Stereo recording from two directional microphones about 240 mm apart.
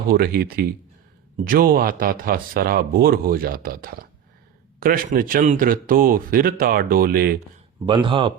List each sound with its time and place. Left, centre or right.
0.1 s speech: right
7.9 s speech: centre